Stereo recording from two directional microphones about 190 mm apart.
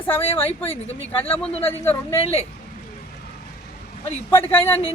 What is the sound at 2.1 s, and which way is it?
Speech, 30° left (ahead or behind).